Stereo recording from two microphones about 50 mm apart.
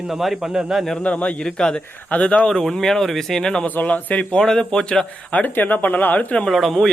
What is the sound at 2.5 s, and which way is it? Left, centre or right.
Speech, centre.